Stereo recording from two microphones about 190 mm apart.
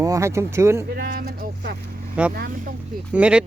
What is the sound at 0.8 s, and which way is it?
Speech, 55° right (ahead or behind).